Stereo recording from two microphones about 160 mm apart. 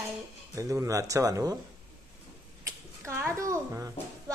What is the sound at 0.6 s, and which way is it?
Speech, 20° right (ahead or behind).